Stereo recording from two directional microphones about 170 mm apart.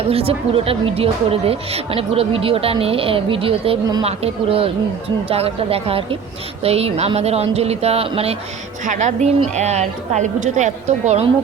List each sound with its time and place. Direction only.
0.0 s speech: 35° right (ahead or behind)
8.8 s a woman's voice: 45° right (ahead or behind)